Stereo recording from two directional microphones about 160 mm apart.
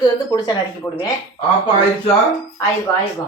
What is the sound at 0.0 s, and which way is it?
Speech, 25° left (ahead or behind).